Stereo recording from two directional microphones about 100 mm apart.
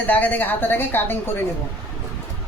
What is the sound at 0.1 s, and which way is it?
A woman's voice, 15° left (ahead or behind).